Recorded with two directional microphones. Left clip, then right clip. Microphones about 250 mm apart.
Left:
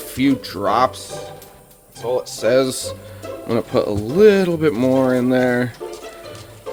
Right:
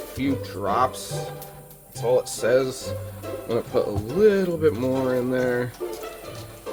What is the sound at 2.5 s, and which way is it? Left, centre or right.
Speech, left.